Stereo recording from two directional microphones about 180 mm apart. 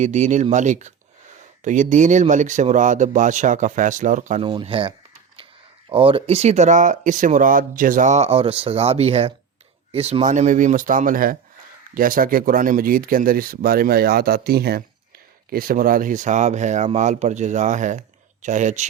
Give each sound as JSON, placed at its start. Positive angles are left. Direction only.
{"t": 0.0, "sound": "speech", "side_deg": -40}